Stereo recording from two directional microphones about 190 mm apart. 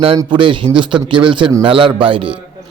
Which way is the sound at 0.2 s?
25° right (ahead or behind).